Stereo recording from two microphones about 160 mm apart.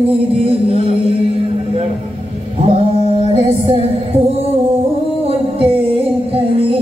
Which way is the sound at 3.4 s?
40° right (ahead or behind).